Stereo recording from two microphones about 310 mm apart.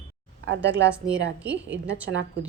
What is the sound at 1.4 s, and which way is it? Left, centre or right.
Speech, centre.